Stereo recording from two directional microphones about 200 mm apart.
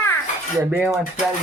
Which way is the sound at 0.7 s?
10° right (ahead or behind).